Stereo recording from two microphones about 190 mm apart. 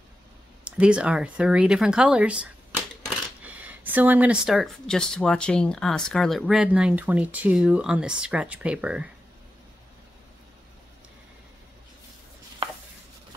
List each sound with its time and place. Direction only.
0.7 s speech: 5° right (ahead or behind)